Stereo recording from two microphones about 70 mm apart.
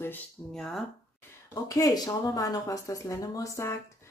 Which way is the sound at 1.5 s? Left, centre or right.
Left.